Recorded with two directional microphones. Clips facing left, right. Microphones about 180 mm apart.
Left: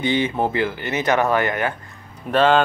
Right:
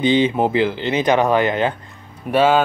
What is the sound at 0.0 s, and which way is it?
Speech, 20° right (ahead or behind).